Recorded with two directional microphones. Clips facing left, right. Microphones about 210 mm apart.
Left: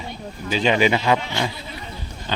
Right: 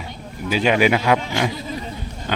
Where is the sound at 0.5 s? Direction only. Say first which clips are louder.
Right 1 dB; 10° right (ahead or behind).